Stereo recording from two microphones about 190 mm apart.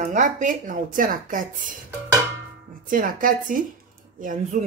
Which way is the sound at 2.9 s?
45° right (ahead or behind).